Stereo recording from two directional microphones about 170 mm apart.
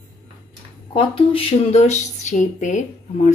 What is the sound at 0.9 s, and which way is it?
Speech, 30° left (ahead or behind).